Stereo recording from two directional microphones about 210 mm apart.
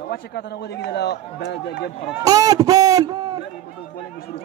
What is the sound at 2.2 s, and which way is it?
Speech, 15° right (ahead or behind).